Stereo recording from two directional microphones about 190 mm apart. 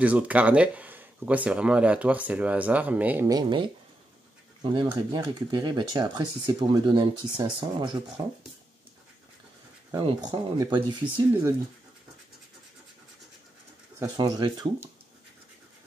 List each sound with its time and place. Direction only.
0.0 s speech: 10° right (ahead or behind)
3.3 s speech: 20° right (ahead or behind)
4.7 s speech: 20° right (ahead or behind)
10.0 s speech: 20° right (ahead or behind)
13.9 s speech: 15° right (ahead or behind)